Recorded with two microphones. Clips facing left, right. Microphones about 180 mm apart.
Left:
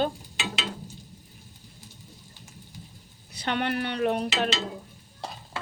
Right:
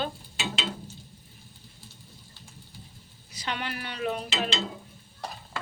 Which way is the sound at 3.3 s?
55° left (ahead or behind).